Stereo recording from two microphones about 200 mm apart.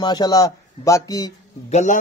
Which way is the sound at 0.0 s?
20° left (ahead or behind).